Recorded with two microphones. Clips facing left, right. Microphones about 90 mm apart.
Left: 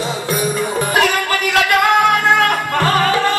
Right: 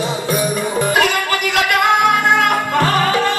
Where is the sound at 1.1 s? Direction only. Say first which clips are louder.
Left 1 dB; 20° right (ahead or behind).